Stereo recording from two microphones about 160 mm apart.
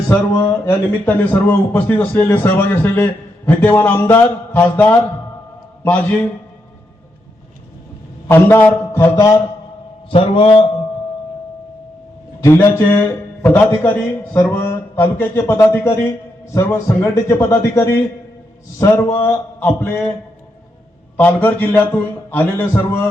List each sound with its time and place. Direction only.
0.1 s speech: 20° left (ahead or behind)
8.3 s speech: 15° left (ahead or behind)
10.1 s a man's voice: 35° left (ahead or behind)
12.4 s a man's voice: 15° left (ahead or behind)
21.2 s speech: 10° left (ahead or behind)